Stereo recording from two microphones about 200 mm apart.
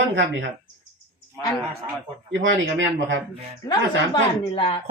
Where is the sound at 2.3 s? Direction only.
65° right (ahead or behind).